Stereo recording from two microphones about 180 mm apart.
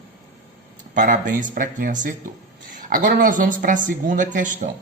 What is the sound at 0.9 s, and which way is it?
Speech, 45° right (ahead or behind).